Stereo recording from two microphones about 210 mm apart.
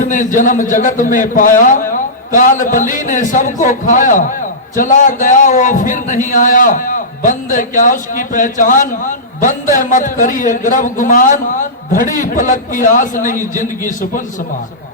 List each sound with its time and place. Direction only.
0.0 s a man's voice: 40° left (ahead or behind)